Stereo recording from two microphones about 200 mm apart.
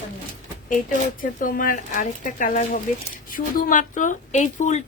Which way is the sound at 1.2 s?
45° left (ahead or behind).